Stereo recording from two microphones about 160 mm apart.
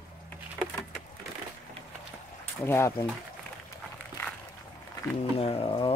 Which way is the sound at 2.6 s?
15° left (ahead or behind).